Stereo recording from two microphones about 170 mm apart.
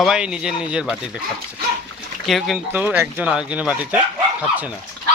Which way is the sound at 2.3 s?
Centre (ahead or behind).